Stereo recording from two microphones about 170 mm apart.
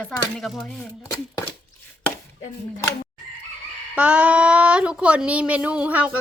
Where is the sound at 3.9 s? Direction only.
5° right (ahead or behind).